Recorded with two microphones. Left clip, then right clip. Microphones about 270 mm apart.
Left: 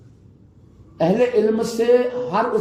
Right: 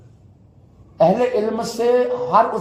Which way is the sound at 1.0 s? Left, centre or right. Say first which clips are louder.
Right 1 dB; centre.